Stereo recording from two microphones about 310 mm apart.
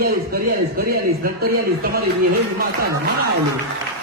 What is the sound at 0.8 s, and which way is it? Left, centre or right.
Music, right.